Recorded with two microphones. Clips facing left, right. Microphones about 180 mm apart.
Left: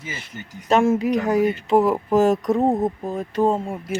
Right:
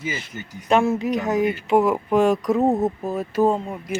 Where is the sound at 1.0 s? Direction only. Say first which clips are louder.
Left 2 dB; 10° left (ahead or behind).